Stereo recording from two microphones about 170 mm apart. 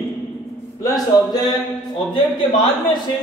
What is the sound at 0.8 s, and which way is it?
Speech, 20° left (ahead or behind).